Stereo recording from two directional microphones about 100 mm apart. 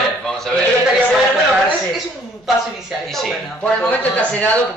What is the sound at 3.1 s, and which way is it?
A man's voice, 5° left (ahead or behind).